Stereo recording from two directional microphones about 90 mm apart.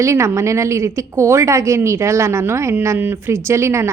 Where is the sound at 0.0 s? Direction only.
35° right (ahead or behind).